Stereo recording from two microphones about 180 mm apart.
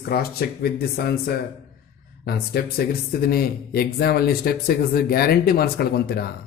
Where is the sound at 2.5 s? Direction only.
65° left (ahead or behind).